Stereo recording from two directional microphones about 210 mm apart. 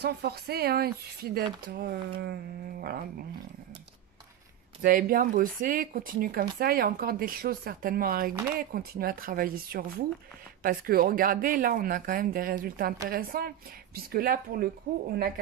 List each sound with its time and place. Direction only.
0.0 s speech: 50° right (ahead or behind)
4.8 s speech: 40° right (ahead or behind)